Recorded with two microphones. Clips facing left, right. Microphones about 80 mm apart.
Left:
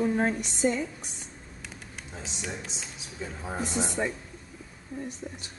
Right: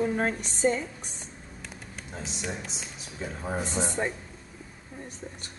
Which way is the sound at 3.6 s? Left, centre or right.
Right.